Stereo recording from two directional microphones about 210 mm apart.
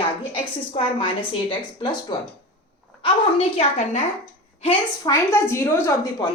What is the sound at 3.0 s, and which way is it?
A woman's voice, 30° left (ahead or behind).